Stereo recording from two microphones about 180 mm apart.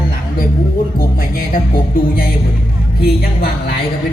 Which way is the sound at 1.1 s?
50° left (ahead or behind).